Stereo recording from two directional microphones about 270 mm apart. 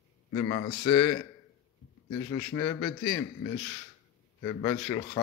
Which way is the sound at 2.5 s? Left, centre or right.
Centre.